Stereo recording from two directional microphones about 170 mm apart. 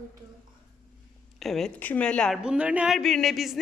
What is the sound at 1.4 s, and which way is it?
A woman's voice, centre (ahead or behind).